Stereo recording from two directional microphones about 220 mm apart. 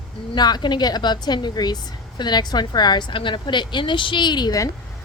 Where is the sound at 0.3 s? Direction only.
20° left (ahead or behind).